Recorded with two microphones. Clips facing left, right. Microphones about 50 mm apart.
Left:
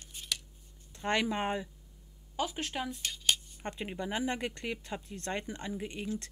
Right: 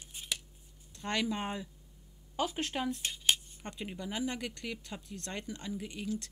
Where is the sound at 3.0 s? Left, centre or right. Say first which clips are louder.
Left 3 dB; centre.